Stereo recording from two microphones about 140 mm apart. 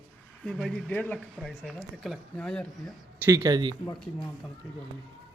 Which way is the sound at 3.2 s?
20° right (ahead or behind).